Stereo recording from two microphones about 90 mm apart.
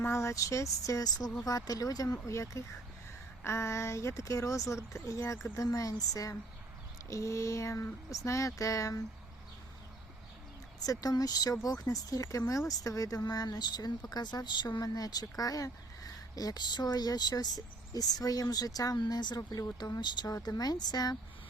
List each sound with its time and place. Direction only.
0.0 s speech: 30° left (ahead or behind)
10.8 s speech: 45° left (ahead or behind)